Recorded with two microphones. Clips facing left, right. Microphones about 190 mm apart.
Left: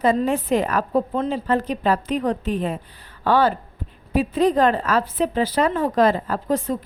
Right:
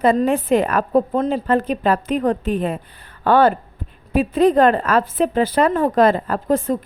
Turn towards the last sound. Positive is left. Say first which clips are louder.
# right 4 dB
turn(degrees=-50)  # may be behind; listen again after turning